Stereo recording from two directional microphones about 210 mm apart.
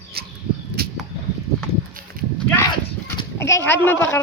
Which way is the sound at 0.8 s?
45° right (ahead or behind).